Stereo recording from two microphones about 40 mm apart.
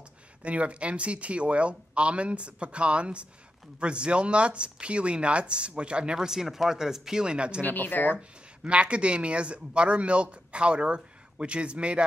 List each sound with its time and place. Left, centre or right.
0.4 s speech: right
6.1 s speech: centre
7.2 s speech: right
7.6 s speech: left
8.6 s speech: right